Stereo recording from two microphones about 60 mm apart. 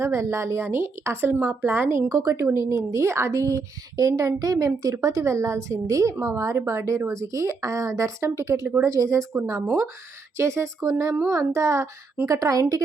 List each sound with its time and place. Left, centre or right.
0.0 s a woman's voice: right
2.0 s a woman's voice: right
9.5 s a woman's voice: right